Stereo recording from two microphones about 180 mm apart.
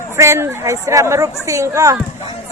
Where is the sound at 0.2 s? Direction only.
15° right (ahead or behind).